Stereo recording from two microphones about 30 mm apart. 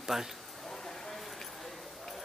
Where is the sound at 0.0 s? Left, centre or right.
Centre.